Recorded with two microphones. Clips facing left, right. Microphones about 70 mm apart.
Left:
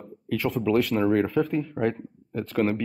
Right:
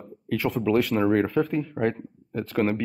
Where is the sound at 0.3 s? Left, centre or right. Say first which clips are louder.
Even; centre.